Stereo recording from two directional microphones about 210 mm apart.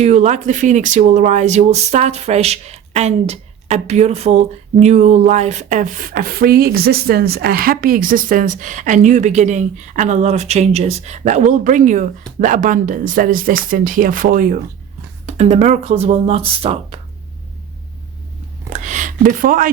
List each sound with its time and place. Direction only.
0.0 s speech: 35° right (ahead or behind)
15.3 s speech: 30° right (ahead or behind)
18.7 s a sound: 35° right (ahead or behind)